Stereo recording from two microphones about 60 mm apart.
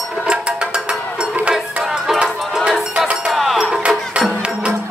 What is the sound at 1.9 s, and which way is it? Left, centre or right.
Music, centre.